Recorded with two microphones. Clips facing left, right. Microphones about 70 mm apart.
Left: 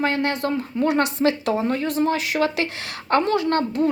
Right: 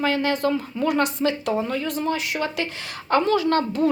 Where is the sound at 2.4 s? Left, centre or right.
Left.